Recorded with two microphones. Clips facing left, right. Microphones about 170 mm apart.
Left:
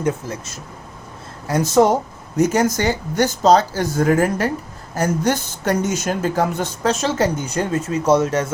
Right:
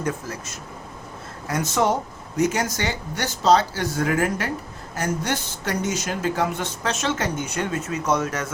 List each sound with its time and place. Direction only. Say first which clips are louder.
0.0 s speech: left 5 dB; 25° left (ahead or behind)
1.5 s speech: left 7 dB; 35° left (ahead or behind)